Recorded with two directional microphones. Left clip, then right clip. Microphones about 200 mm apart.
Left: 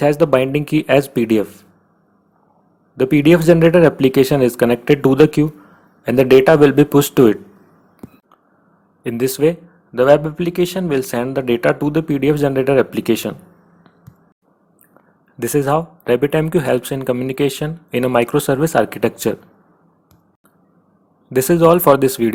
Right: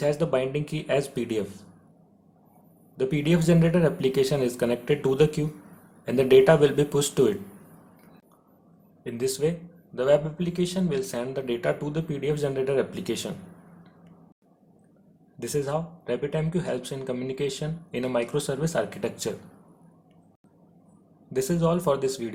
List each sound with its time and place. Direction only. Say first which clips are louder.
0.0 s speech: left 11 dB; 40° left (ahead or behind)
3.0 s speech: left 13 dB; 40° left (ahead or behind)
9.0 s speech: left 11 dB; 40° left (ahead or behind)
15.4 s speech: left 12 dB; 40° left (ahead or behind)
21.3 s speech: left 14 dB; 40° left (ahead or behind)